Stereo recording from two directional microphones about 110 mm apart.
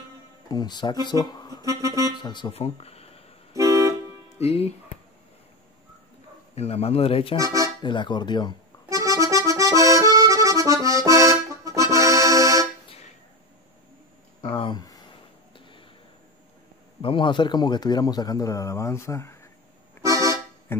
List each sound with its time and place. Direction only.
0.5 s speech: 40° left (ahead or behind)
1.7 s clarinet: 30° right (ahead or behind)
2.1 s speech: 45° left (ahead or behind)
2.5 s speech: 65° left (ahead or behind)
3.5 s vehicle: 30° right (ahead or behind)
4.4 s speech: 70° left (ahead or behind)
6.5 s speech: 70° left (ahead or behind)
7.3 s speech: 30° right (ahead or behind)
7.8 s speech: 45° left (ahead or behind)
8.8 s accordion: 30° right (ahead or behind)
14.4 s speech: 50° left (ahead or behind)
17.0 s a man's voice: 50° left (ahead or behind); by 19.3 s 25° left (ahead or behind)
20.0 s accordion: 30° right (ahead or behind)